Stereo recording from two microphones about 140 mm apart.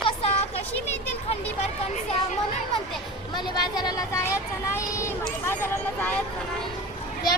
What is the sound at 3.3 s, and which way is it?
A child's voice, 30° left (ahead or behind).